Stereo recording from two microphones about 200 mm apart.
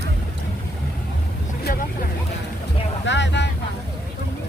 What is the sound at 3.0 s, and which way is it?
Vehicle, 60° left (ahead or behind).